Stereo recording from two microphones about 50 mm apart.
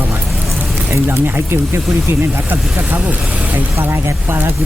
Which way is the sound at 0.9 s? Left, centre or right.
Right.